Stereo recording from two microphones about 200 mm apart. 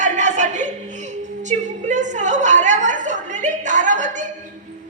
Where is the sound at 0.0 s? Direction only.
35° right (ahead or behind).